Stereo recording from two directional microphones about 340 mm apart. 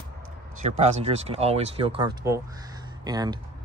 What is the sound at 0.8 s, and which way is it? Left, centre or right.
Speech, centre.